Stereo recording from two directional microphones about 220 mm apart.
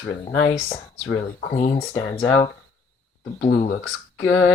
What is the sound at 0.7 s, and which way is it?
Speech, 25° left (ahead or behind).